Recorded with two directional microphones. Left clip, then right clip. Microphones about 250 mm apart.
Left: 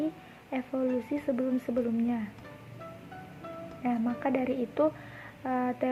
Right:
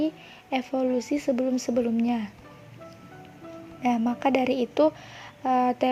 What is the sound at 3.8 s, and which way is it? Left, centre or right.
Speech, right.